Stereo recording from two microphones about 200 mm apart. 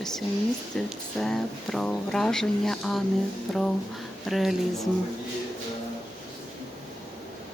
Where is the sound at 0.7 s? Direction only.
Centre (ahead or behind).